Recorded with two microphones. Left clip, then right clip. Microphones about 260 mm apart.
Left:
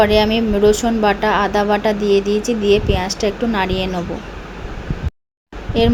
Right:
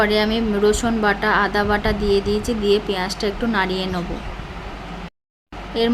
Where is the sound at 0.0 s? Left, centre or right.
Centre.